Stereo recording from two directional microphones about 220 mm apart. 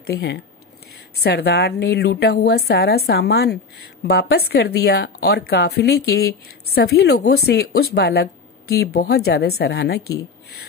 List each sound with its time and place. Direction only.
0.0 s a woman's voice: 45° left (ahead or behind)